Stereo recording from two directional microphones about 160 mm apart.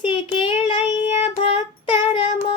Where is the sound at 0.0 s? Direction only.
30° left (ahead or behind).